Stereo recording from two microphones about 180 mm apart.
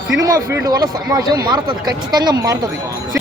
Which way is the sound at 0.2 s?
20° right (ahead or behind).